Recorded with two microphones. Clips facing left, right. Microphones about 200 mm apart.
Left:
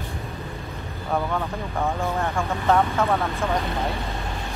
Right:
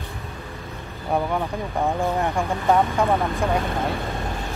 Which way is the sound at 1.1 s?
15° right (ahead or behind).